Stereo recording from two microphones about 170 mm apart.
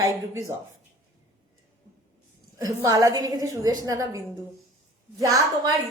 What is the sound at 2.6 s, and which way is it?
A woman's voice, 20° right (ahead or behind).